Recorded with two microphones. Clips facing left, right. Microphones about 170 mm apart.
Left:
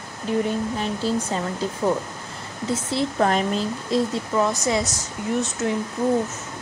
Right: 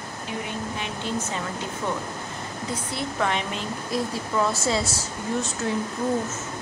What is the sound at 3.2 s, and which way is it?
Speech, 40° left (ahead or behind).